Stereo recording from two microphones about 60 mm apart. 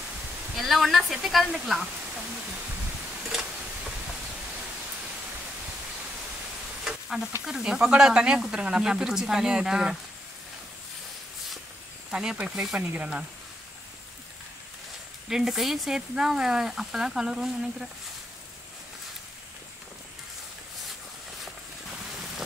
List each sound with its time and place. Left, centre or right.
0.6 s speech: centre
6.8 s a sound: centre
7.4 s speech: centre
12.1 s speech: centre
12.7 s speech: centre
15.2 s speech: centre